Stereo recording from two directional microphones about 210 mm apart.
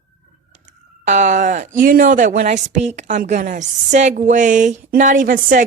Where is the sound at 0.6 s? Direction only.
35° right (ahead or behind).